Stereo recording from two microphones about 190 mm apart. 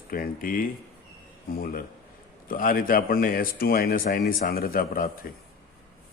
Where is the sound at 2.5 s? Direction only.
50° left (ahead or behind).